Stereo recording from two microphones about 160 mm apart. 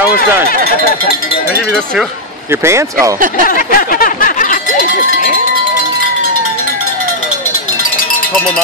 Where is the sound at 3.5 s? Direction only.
65° left (ahead or behind).